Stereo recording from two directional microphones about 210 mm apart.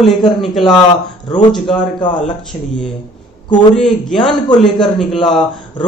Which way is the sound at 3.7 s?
Centre (ahead or behind).